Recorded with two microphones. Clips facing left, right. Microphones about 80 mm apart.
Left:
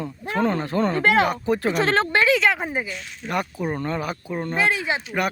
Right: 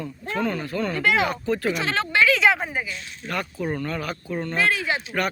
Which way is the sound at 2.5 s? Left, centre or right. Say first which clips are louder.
Left 2 dB; centre.